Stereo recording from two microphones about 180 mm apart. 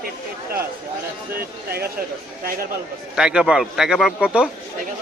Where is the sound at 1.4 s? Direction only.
60° right (ahead or behind).